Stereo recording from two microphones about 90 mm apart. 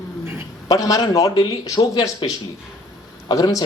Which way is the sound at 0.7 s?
40° left (ahead or behind).